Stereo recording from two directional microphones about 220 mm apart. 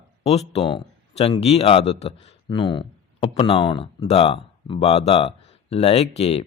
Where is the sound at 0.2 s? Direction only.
30° left (ahead or behind).